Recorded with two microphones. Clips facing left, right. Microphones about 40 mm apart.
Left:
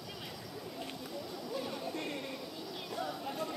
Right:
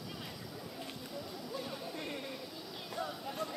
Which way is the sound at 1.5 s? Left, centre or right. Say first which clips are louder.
Left 4 dB; centre.